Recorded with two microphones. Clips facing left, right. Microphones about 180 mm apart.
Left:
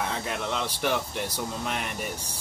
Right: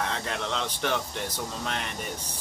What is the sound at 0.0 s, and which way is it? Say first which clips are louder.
Speech: left 1 dB; 10° left (ahead or behind).